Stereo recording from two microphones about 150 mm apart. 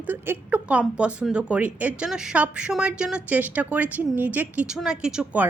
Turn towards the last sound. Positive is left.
turn(degrees=-5)  # may be behind; listen again after turning